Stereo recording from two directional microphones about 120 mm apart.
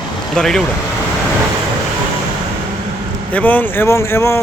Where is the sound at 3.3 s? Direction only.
15° left (ahead or behind).